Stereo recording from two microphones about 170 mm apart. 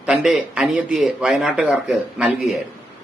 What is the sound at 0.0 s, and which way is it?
A man's voice, 5° right (ahead or behind).